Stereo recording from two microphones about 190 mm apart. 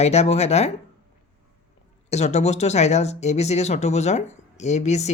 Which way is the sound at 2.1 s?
35° left (ahead or behind).